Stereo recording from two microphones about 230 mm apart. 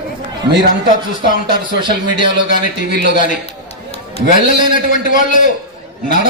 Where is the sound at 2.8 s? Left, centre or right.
Left.